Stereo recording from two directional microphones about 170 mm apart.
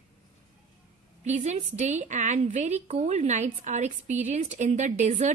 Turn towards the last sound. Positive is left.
turn(degrees=-45)  # may be behind; listen again after turning